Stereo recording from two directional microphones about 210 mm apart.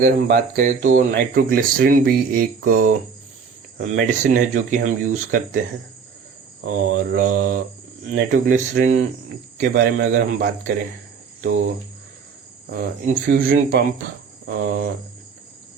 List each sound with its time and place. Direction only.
0.0 s speech: 40° right (ahead or behind)
6.7 s speech: 45° right (ahead or behind)
12.7 s speech: 50° right (ahead or behind)